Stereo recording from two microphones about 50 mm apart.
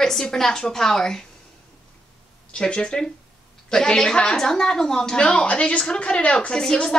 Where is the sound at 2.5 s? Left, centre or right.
Centre.